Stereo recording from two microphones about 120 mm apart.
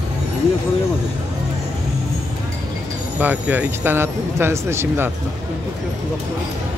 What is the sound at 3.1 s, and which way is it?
Speech, 10° right (ahead or behind).